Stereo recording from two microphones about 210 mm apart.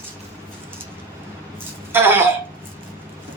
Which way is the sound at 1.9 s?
10° right (ahead or behind).